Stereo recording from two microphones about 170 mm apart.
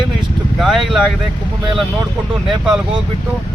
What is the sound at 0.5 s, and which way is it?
Speech, centre (ahead or behind).